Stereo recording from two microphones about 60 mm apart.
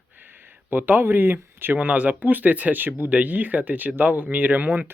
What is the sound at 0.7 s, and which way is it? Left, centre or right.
Speech, right.